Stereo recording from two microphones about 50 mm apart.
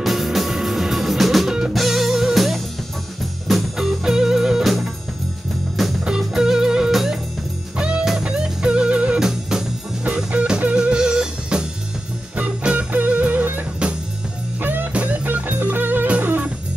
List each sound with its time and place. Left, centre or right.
0.0 s music: centre
6.0 s music: centre
7.7 s music: centre
9.2 s music: centre
12.4 s music: right
14.9 s music: right